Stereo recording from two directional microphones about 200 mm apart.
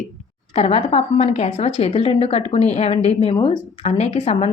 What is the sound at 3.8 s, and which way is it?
Speech, 30° left (ahead or behind).